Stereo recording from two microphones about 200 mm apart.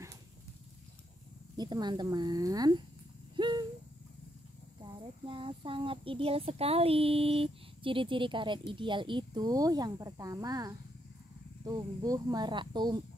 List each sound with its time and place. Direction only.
1.6 s speech: 20° right (ahead or behind)
3.3 s a sound: 20° right (ahead or behind)
5.2 s speech: 25° right (ahead or behind)